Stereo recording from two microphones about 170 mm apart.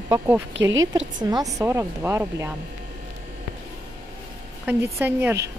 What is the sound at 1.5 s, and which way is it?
Speech, 15° right (ahead or behind).